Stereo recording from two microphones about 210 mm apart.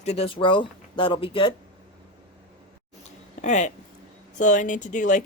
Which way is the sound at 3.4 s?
35° left (ahead or behind).